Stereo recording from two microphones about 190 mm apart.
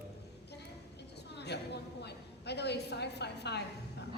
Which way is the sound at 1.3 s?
60° left (ahead or behind).